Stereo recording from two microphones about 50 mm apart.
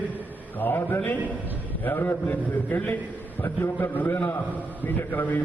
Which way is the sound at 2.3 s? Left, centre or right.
Left.